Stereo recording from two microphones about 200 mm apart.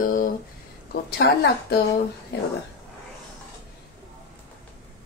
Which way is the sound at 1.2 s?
55° left (ahead or behind).